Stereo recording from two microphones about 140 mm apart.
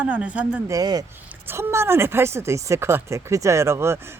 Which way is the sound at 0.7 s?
25° right (ahead or behind).